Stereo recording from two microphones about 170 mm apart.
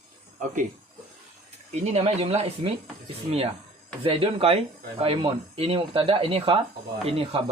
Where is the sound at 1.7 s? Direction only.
40° right (ahead or behind).